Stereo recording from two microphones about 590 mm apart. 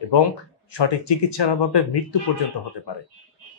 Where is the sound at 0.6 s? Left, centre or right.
Left.